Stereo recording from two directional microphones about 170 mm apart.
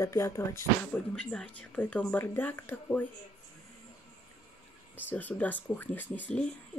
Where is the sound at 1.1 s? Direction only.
5° left (ahead or behind).